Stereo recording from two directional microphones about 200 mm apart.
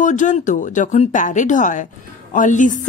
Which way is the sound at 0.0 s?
40° left (ahead or behind).